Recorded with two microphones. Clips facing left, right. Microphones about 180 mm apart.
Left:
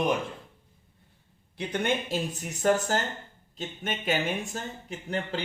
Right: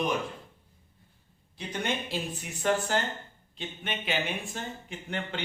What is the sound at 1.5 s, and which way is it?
Speech, 50° left (ahead or behind).